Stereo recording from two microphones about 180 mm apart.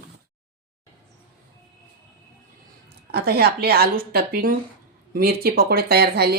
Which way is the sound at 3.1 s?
60° right (ahead or behind).